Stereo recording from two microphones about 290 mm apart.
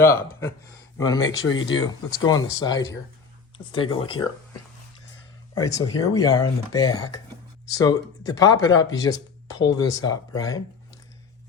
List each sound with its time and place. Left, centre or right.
0.0 s speech: centre
1.4 s speech: left
1.8 s speech: centre
3.9 s speech: centre
5.5 s speech: centre